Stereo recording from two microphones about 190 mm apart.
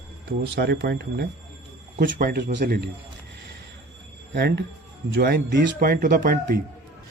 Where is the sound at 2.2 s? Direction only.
50° right (ahead or behind).